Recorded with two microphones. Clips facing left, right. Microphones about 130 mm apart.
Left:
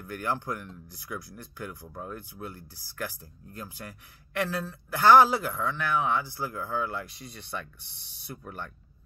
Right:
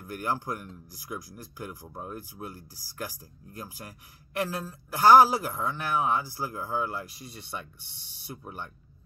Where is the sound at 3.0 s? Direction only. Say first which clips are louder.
Left 1 dB; 35° right (ahead or behind).